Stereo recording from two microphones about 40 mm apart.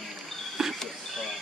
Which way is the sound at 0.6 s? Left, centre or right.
Centre.